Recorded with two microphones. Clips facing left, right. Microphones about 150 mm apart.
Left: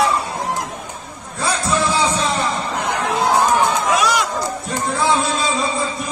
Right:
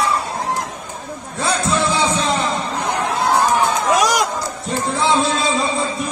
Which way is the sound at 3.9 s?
40° right (ahead or behind).